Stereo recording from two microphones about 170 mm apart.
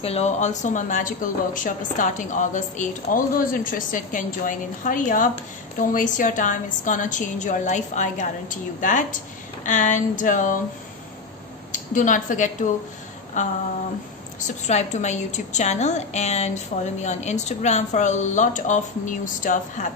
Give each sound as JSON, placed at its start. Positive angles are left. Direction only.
{"t": 0.0, "sound": "speech", "side_deg": 40}
{"t": 11.7, "sound": "speech", "side_deg": 50}
{"t": 14.7, "sound": "speech", "side_deg": 40}